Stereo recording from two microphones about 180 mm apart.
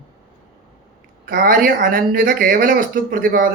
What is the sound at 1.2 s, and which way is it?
Speech, 50° right (ahead or behind).